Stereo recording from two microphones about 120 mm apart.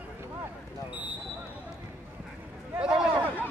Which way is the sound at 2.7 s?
5° right (ahead or behind).